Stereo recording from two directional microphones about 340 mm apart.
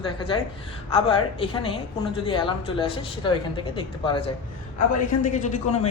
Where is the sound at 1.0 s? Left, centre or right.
Centre.